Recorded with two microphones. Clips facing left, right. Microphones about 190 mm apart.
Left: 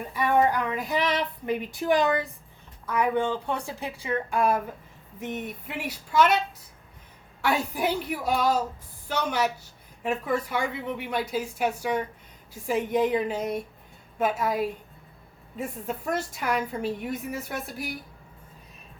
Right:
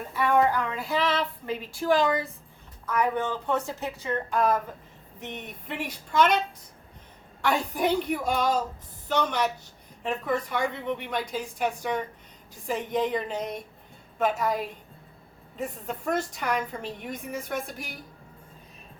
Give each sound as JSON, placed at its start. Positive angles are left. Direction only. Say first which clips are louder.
{"t": 0.1, "sound": "child singing", "louder": "even", "side_deg": 15}
{"t": 7.4, "sound": "a woman's voice", "louder": "even", "side_deg": 5}
{"t": 9.0, "sound": "child singing", "louder": "right 1 dB", "side_deg": 5}
{"t": 15.5, "sound": "a woman's voice", "louder": "left 1 dB", "side_deg": 5}